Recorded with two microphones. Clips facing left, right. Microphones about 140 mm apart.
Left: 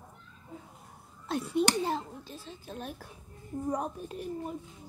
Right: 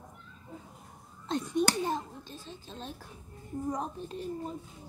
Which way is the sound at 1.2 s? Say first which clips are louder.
Left 1 dB; 5° left (ahead or behind).